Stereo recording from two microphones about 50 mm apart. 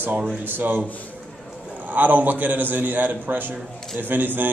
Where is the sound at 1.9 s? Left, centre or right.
Right.